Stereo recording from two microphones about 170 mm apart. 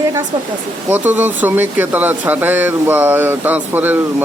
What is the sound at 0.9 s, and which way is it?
Speech, 10° right (ahead or behind).